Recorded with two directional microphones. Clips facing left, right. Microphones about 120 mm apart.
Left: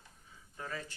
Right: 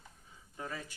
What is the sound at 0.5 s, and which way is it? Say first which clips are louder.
Speech: even; 15° right (ahead or behind).